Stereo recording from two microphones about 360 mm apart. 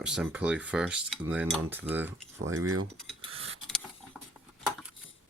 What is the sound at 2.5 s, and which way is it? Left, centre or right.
Speech, right.